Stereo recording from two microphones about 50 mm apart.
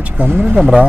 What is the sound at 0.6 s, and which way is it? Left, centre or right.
Speech, centre.